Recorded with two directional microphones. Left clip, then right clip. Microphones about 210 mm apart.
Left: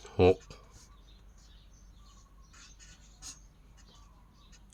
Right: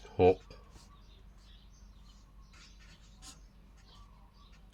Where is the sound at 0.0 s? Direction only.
40° left (ahead or behind).